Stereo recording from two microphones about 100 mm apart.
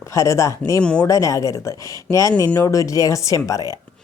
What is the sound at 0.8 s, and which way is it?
Speech, 10° left (ahead or behind).